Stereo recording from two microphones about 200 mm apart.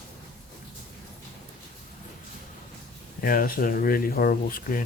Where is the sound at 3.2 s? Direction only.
45° left (ahead or behind).